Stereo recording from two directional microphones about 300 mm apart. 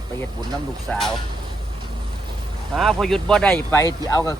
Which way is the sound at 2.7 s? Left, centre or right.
Centre.